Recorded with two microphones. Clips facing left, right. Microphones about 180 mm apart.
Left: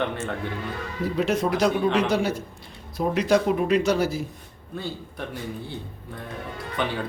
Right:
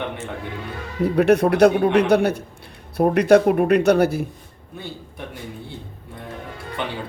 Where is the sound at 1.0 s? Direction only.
65° right (ahead or behind).